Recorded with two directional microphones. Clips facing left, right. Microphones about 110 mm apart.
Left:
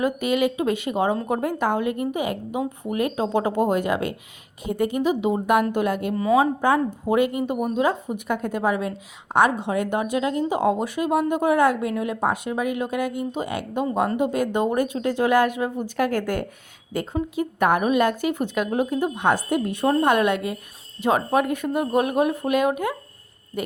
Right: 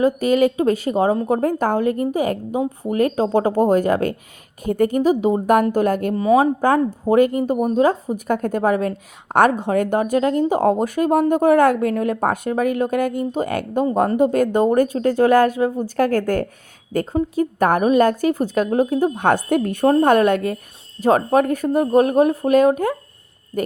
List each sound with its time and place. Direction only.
0.0 s a woman's voice: 40° right (ahead or behind)
6.1 s speech: 25° right (ahead or behind)
6.6 s a woman's voice: 40° right (ahead or behind)